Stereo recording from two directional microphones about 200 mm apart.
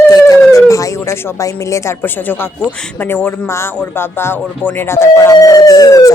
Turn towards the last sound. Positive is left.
turn(degrees=15)  # may be behind; listen again after turning